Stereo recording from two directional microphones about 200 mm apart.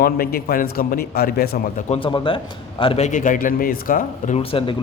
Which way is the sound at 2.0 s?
25° left (ahead or behind).